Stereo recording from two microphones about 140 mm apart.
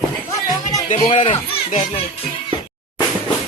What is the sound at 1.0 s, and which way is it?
Children playing, 55° left (ahead or behind).